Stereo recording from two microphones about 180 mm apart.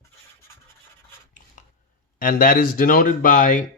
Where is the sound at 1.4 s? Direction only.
50° left (ahead or behind).